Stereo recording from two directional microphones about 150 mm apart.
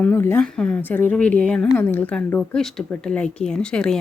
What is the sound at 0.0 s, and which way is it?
Speech, 15° left (ahead or behind).